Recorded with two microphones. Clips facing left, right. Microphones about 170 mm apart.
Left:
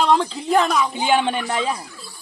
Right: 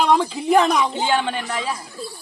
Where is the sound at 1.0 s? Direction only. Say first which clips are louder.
Left 2 dB; 15° left (ahead or behind).